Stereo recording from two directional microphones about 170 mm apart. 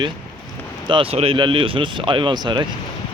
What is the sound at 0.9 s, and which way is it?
Speech, 30° right (ahead or behind).